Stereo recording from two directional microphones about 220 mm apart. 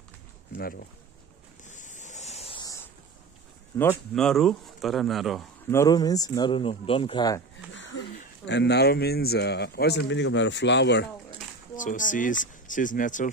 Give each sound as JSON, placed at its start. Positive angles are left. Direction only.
{"t": 0.6, "sound": "a man's voice", "side_deg": 45}
{"t": 1.7, "sound": "ocean", "side_deg": 35}
{"t": 3.9, "sound": "speech", "side_deg": 0}
{"t": 5.7, "sound": "speech", "side_deg": 15}
{"t": 7.7, "sound": "a sound", "side_deg": 55}
{"t": 8.5, "sound": "a man's voice", "side_deg": 50}
{"t": 11.7, "sound": "speech", "side_deg": 35}